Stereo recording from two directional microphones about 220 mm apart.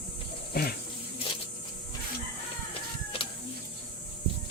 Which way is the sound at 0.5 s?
45° left (ahead or behind).